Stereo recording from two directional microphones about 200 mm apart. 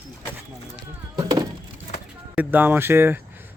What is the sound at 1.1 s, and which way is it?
Speech, 20° right (ahead or behind).